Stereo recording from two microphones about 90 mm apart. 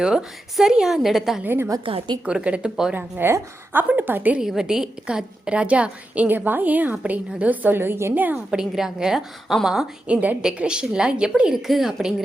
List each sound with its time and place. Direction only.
0.0 s a woman's voice: 10° right (ahead or behind)
1.5 s a woman's voice: 25° right (ahead or behind)
1.8 s a woman's voice: 80° right
2.2 s a woman's voice: 15° right (ahead or behind)
2.9 s a woman's voice: 20° right (ahead or behind)
4.4 s a woman's voice: 5° right (ahead or behind)
8.5 s a woman's voice: 5° right (ahead or behind)